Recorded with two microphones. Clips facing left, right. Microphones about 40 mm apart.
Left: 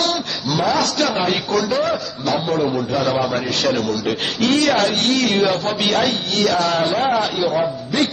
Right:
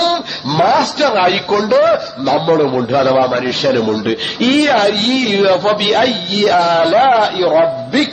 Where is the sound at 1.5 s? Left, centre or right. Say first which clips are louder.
Right 8 dB; centre.